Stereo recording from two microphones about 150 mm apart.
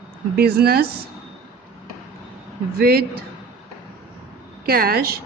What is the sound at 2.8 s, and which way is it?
Speech, 90° right.